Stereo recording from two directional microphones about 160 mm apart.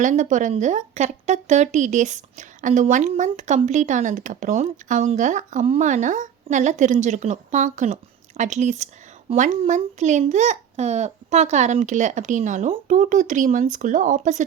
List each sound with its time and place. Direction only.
0.0 s speech: 50° right (ahead or behind)